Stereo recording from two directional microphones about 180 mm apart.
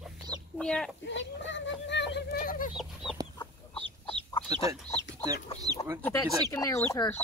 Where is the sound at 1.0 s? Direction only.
90° left; by 2.7 s 50° left (ahead or behind).